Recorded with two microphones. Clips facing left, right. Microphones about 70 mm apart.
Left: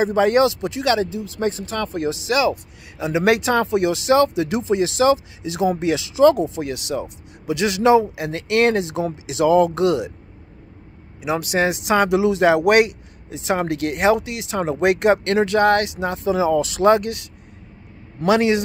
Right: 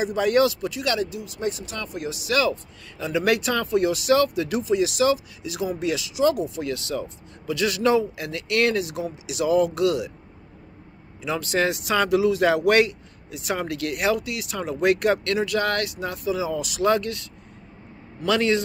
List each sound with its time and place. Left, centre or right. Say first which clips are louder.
0.0 s speech: left 4 dB; left
1.4 s speech: left 6 dB; left
11.1 s speech: left 3 dB; centre
18.2 s speech: left 4 dB; left